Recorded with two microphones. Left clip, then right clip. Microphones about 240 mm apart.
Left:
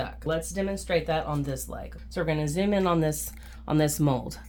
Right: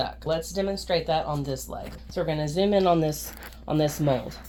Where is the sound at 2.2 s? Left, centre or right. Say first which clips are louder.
Right 3 dB; left.